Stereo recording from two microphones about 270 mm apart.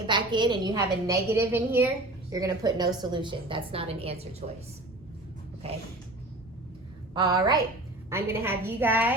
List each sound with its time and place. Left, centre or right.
0.1 s a woman's voice: centre
7.1 s a woman's voice: centre